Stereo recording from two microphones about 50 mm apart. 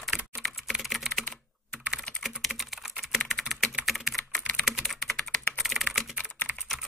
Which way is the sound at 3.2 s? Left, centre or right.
Centre.